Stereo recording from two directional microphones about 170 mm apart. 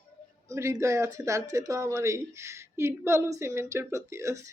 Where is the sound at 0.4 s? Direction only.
15° right (ahead or behind).